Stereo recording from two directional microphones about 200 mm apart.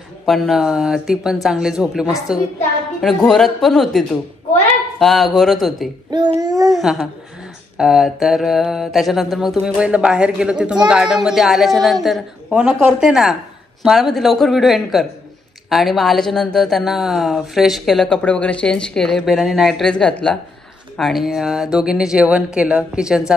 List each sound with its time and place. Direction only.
0.2 s speech: centre (ahead or behind)
6.0 s child singing: 20° right (ahead or behind)
6.7 s speech: centre (ahead or behind)